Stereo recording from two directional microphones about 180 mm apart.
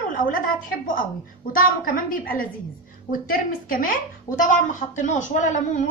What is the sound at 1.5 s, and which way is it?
A woman's voice, 50° left (ahead or behind).